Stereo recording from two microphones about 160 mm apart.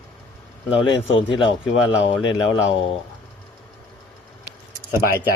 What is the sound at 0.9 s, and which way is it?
Speech, 30° left (ahead or behind).